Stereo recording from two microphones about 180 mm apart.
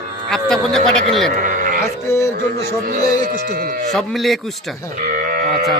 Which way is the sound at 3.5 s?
55° right (ahead or behind).